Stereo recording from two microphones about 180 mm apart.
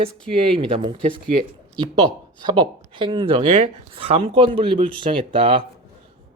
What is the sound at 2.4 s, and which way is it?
Speech, 25° right (ahead or behind).